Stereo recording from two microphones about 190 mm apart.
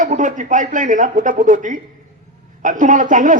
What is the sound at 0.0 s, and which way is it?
A man's voice, 40° right (ahead or behind).